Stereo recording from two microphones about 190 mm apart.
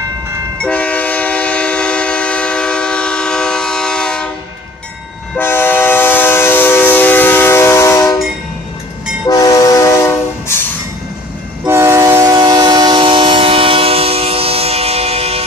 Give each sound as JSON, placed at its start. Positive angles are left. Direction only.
{"t": 0.6, "sound": "train", "side_deg": 5}
{"t": 5.3, "sound": "train", "side_deg": 10}
{"t": 9.3, "sound": "train", "side_deg": 20}
{"t": 11.6, "sound": "train", "side_deg": -15}